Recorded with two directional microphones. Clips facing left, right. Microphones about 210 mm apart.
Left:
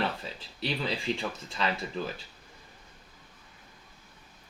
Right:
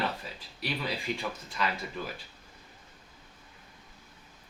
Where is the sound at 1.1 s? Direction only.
30° left (ahead or behind).